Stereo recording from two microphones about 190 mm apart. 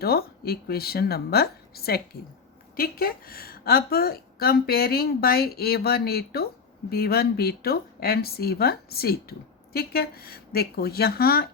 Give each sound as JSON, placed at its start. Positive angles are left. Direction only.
{"t": 0.0, "sound": "a woman's voice", "side_deg": 55}